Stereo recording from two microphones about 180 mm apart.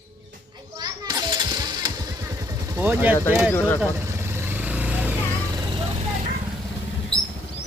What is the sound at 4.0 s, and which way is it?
Vehicle, 15° right (ahead or behind).